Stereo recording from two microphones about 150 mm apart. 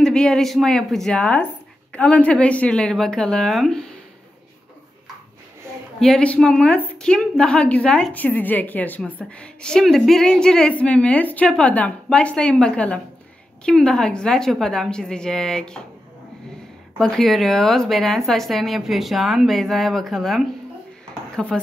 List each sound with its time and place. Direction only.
0.0 s speech: 5° left (ahead or behind)
5.9 s a woman's voice: 5° left (ahead or behind)
17.0 s speech: centre (ahead or behind)